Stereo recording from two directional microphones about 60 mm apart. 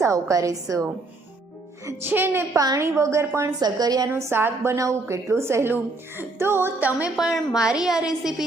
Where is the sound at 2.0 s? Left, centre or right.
Right.